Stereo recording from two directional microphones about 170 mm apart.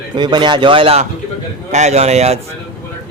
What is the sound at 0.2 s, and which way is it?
A man's voice, 25° right (ahead or behind).